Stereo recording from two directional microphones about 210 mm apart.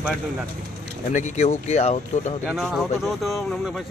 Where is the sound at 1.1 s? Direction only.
35° left (ahead or behind).